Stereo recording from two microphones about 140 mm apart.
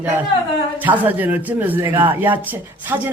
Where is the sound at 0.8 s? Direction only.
15° right (ahead or behind).